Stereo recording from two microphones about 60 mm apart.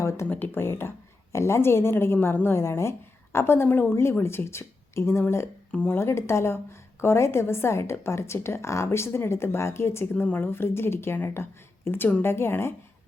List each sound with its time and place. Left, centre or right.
0.0 s a sound: left
0.3 s speech: left
5.7 s speech: left
6.0 s speech: left